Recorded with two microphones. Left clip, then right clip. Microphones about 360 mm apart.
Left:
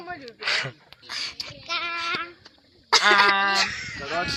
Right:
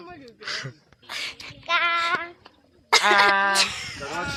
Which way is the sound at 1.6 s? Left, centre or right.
Centre.